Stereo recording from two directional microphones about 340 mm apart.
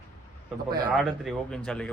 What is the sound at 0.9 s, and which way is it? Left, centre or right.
Speech, centre.